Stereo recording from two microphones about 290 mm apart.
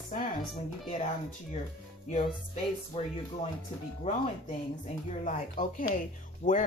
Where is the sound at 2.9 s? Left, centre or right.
Centre.